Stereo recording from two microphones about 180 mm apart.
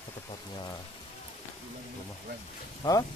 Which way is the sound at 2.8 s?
20° left (ahead or behind).